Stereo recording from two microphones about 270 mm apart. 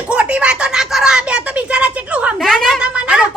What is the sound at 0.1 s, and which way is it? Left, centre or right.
Speech, centre.